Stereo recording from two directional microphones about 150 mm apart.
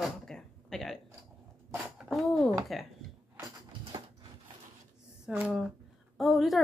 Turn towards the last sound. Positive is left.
turn(degrees=0)  # may be behind; listen again after turning